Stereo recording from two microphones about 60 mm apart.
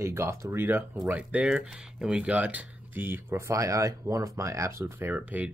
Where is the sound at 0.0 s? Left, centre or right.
Right.